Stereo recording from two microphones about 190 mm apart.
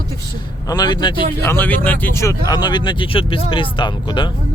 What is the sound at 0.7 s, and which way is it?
Speech, 20° left (ahead or behind).